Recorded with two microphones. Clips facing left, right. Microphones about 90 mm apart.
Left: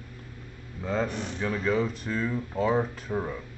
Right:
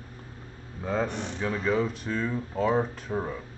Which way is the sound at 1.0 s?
30° right (ahead or behind).